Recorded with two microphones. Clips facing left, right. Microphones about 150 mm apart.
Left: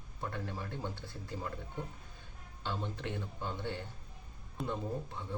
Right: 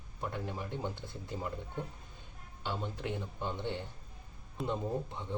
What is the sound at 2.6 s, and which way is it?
Speech, 15° right (ahead or behind).